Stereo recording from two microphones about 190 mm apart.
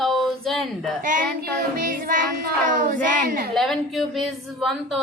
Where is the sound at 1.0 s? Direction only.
45° right (ahead or behind).